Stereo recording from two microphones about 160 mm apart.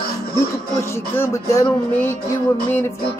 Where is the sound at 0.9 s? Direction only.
15° left (ahead or behind).